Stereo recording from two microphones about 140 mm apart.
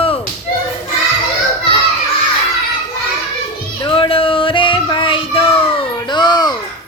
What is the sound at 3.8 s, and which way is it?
Child singing, 40° left (ahead or behind).